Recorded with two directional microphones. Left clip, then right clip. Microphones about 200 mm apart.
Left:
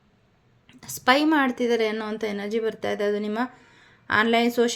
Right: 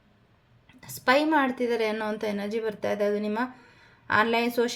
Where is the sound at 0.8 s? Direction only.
30° left (ahead or behind).